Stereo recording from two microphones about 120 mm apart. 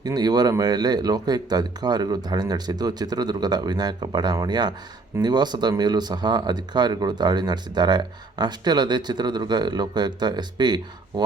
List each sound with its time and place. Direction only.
0.0 s speech: 35° right (ahead or behind)